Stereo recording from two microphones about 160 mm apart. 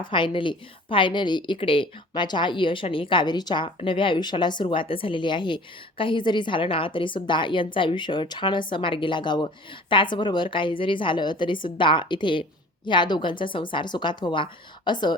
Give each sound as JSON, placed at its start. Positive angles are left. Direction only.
{"t": 0.0, "sound": "a woman's voice", "side_deg": 30}